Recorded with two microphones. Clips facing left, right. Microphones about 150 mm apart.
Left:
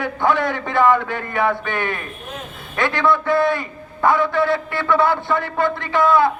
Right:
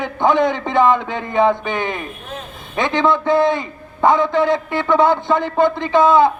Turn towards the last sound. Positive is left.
turn(degrees=-20)  # may be behind; listen again after turning